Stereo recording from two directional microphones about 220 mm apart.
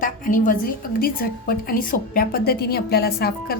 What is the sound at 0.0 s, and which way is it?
A woman's voice, 40° left (ahead or behind).